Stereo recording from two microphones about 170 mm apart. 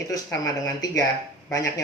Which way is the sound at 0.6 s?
20° left (ahead or behind).